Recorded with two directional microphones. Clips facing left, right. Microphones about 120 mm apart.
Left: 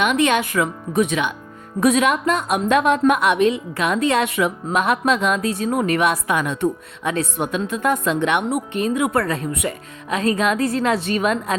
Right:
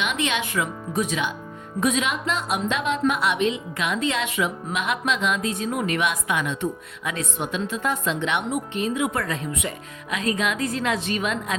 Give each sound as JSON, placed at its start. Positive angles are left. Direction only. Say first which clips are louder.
{"t": 0.0, "sound": "a woman's voice", "louder": "left 8 dB", "side_deg": 50}
{"t": 7.0, "sound": "a woman's voice", "louder": "left 7 dB", "side_deg": 35}
{"t": 7.3, "sound": "a woman's voice", "louder": "left 4 dB", "side_deg": 50}
{"t": 10.1, "sound": "a woman's voice", "louder": "left 6 dB", "side_deg": 35}